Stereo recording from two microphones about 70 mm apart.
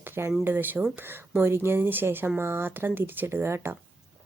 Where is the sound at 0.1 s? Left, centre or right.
Right.